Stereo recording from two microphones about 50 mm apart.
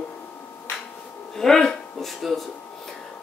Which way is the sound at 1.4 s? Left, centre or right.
Centre.